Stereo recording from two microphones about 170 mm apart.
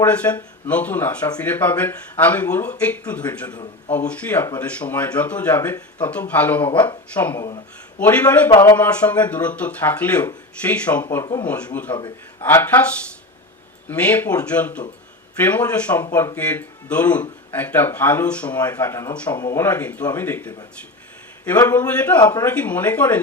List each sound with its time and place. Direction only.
0.0 s speech: 10° left (ahead or behind)
8.4 s speech: 25° left (ahead or behind)
8.7 s speech: 10° left (ahead or behind)
11.0 s speech: 20° left (ahead or behind)
11.4 s speech: 10° left (ahead or behind)
13.9 s speech: 10° left (ahead or behind)
21.6 s speech: 10° left (ahead or behind)